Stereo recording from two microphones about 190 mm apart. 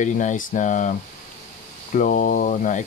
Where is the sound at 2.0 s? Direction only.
45° left (ahead or behind).